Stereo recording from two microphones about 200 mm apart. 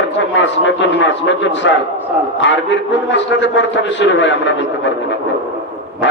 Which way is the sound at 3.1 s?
65° left (ahead or behind).